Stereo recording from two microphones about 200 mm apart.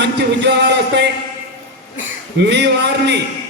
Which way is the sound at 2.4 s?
60° right (ahead or behind).